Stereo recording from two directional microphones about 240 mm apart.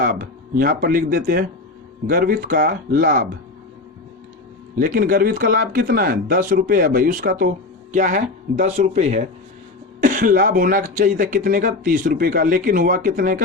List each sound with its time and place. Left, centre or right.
0.0 s speech: right
4.8 s speech: right